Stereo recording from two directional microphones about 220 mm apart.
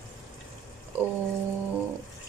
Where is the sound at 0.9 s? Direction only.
10° right (ahead or behind).